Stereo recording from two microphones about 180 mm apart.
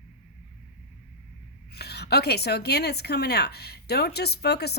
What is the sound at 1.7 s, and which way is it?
Speech, 65° left (ahead or behind).